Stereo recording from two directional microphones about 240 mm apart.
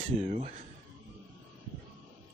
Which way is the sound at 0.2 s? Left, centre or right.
Right.